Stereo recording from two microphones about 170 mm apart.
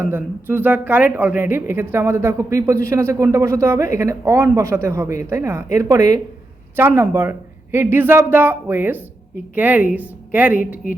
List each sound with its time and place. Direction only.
0.0 s a woman's voice: 15° right (ahead or behind)